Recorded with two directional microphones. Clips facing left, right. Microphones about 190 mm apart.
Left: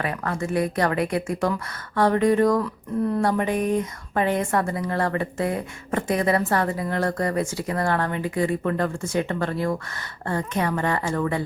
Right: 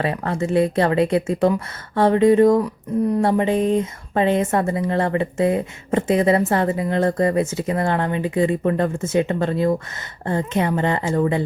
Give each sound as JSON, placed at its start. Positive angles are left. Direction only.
{"t": 0.0, "sound": "speech", "side_deg": -25}